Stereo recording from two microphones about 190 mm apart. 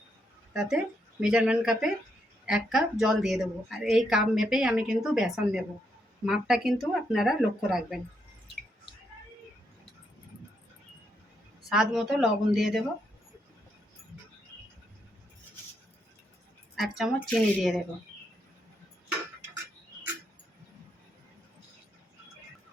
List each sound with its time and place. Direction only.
0.5 s a woman's voice: 5° right (ahead or behind)
11.7 s a woman's voice: 5° right (ahead or behind)
16.7 s a woman's voice: centre (ahead or behind)